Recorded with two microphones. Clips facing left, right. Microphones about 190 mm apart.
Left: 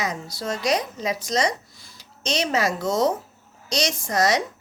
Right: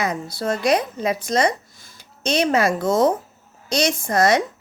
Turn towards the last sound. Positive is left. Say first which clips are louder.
# right 4 dB
turn(degrees=-55)  # may be behind; listen again after turning